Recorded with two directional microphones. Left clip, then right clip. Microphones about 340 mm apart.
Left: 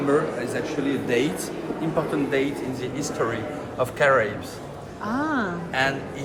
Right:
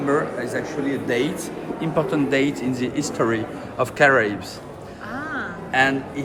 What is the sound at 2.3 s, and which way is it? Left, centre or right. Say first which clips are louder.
Speech: right 3 dB; right.